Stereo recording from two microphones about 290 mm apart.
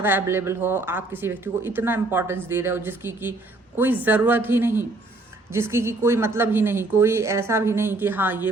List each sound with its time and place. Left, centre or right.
0.0 s speech: centre